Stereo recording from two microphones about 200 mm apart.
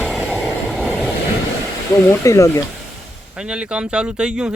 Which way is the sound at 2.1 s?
15° left (ahead or behind).